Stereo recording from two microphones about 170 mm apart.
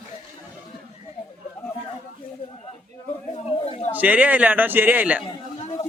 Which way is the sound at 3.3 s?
35° left (ahead or behind).